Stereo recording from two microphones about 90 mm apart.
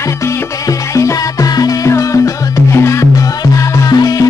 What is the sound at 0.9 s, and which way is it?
Music, 35° left (ahead or behind).